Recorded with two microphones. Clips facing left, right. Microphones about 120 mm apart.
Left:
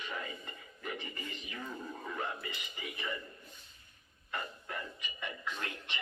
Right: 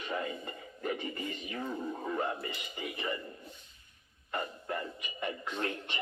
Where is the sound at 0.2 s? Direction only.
35° right (ahead or behind).